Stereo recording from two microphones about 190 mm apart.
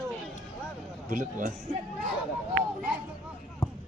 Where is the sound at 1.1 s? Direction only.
45° right (ahead or behind).